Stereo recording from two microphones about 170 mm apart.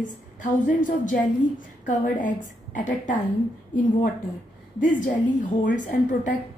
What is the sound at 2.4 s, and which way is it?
Speech, 50° left (ahead or behind).